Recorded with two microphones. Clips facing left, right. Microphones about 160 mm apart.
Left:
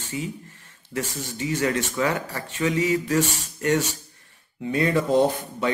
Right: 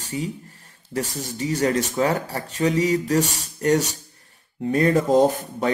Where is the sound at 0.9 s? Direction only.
35° right (ahead or behind).